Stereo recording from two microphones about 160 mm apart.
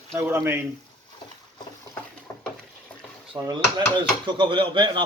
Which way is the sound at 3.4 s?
25° right (ahead or behind).